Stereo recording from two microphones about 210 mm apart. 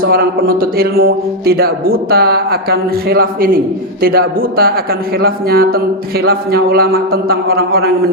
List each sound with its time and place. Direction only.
0.0 s a man's voice: 45° right (ahead or behind)